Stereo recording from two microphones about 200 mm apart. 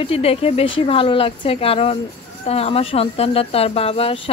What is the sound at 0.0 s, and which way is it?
Speech, 30° left (ahead or behind).